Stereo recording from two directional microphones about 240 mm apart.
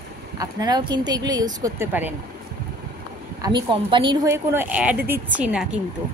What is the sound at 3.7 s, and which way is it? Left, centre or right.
Speech, centre.